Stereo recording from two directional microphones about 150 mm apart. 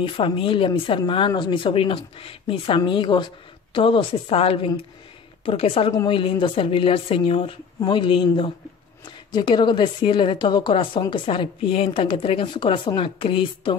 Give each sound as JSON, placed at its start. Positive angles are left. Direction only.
{"t": 0.0, "sound": "speech", "side_deg": 35}